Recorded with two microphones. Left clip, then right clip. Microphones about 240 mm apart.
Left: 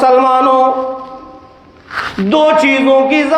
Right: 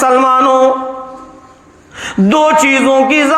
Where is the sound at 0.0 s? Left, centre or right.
Right.